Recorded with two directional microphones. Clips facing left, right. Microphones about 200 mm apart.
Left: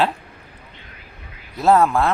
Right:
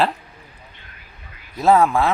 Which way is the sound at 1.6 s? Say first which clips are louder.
Even; centre (ahead or behind).